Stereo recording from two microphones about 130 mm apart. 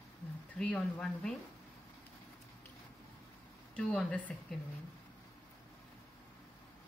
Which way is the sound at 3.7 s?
5° left (ahead or behind).